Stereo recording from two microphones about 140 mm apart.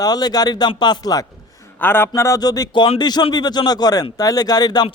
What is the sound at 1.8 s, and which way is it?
A man's voice, 15° left (ahead or behind).